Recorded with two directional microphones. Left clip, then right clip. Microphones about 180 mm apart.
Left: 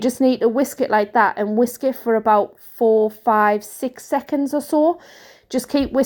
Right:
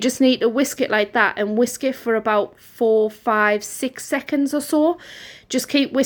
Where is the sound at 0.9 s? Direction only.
Centre (ahead or behind).